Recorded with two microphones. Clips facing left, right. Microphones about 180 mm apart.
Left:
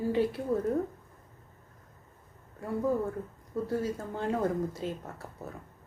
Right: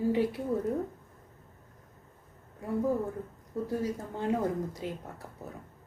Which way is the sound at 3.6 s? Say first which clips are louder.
Even; 15° right (ahead or behind).